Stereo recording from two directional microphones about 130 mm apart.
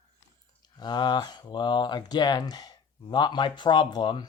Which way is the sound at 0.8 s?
35° left (ahead or behind).